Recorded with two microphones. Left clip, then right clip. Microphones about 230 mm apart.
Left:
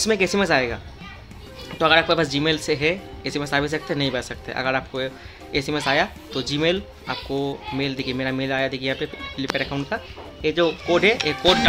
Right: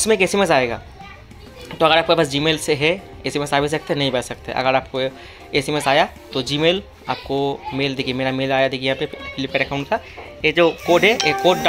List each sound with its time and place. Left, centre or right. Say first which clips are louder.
0.0 s speech: right 4 dB; centre